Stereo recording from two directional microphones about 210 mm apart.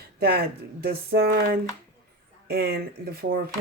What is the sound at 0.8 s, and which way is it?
Speech, 50° right (ahead or behind).